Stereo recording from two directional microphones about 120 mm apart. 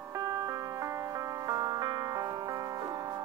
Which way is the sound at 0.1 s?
30° right (ahead or behind).